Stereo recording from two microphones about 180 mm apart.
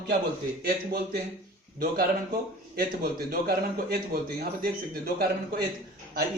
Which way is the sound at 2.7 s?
60° right (ahead or behind).